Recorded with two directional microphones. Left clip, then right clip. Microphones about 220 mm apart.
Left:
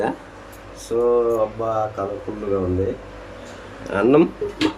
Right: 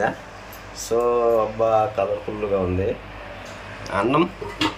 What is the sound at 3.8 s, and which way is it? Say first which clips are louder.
Speech: left 4 dB; 15° left (ahead or behind).